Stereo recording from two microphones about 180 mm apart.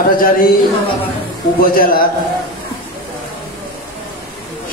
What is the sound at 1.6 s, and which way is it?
Speech, 55° left (ahead or behind).